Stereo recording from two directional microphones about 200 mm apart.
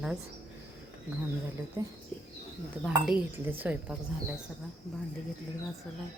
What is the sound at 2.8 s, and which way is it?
Speech, 5° right (ahead or behind).